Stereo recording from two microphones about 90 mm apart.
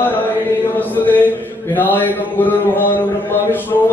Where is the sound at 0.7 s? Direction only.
20° left (ahead or behind).